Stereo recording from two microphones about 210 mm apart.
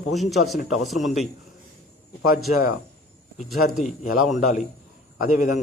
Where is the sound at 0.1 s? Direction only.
Centre (ahead or behind).